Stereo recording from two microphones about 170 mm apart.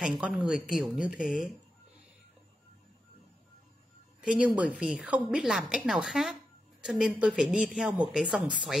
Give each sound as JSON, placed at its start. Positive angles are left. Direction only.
{"t": 0.2, "sound": "speech", "side_deg": -5}
{"t": 4.2, "sound": "speech", "side_deg": -5}